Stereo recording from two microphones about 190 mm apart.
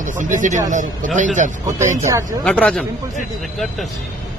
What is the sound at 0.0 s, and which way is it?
Speech, 40° right (ahead or behind).